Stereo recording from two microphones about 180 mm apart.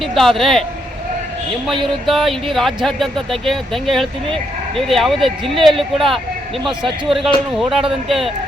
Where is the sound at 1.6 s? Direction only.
Centre (ahead or behind).